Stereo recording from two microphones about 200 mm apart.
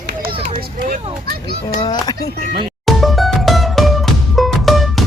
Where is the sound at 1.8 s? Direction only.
20° left (ahead or behind).